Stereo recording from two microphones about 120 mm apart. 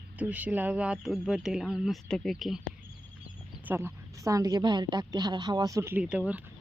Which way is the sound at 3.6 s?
15° right (ahead or behind).